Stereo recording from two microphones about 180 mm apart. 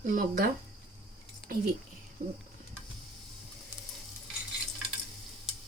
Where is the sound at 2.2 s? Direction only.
50° right (ahead or behind).